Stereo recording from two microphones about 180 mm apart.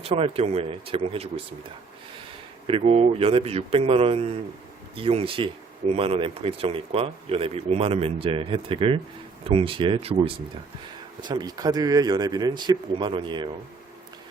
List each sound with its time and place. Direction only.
0.0 s speech: 35° right (ahead or behind)
2.6 s speech: 30° right (ahead or behind)